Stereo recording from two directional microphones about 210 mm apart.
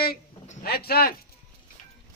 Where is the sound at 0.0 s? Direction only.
45° left (ahead or behind).